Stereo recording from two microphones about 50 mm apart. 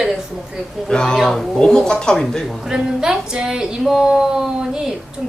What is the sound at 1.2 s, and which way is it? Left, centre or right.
Speech, centre.